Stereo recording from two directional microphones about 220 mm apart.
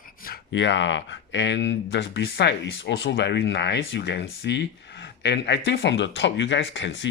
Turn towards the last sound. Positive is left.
turn(degrees=55)  # may be behind; listen again after turning